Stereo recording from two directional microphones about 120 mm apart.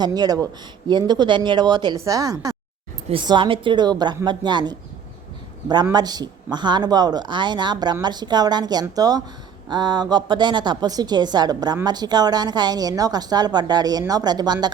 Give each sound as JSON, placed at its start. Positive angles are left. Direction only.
{"t": 0.0, "sound": "a woman's voice", "side_deg": -35}
{"t": 3.2, "sound": "a woman's voice", "side_deg": -40}